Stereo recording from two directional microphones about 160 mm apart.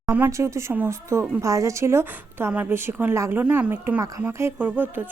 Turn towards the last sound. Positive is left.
turn(degrees=-10)  # may be behind; listen again after turning